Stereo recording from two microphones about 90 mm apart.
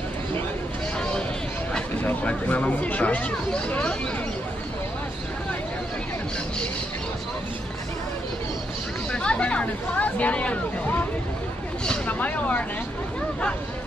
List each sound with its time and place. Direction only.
2.0 s speech: 20° left (ahead or behind)
9.1 s hubbub: 10° left (ahead or behind)
11.8 s a sound: 15° left (ahead or behind)